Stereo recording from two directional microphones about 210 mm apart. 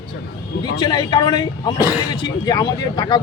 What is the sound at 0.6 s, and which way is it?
Speech, 20° left (ahead or behind).